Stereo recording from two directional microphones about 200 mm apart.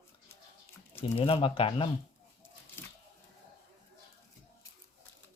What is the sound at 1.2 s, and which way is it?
Speech, 25° left (ahead or behind).